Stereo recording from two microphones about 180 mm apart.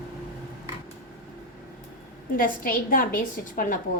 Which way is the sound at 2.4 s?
50° left (ahead or behind).